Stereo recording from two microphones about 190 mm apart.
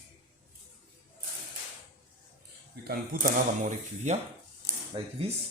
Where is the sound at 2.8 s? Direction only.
50° right (ahead or behind).